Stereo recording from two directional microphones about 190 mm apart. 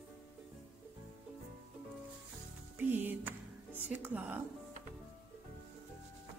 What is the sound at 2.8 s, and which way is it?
Speech, 10° right (ahead or behind).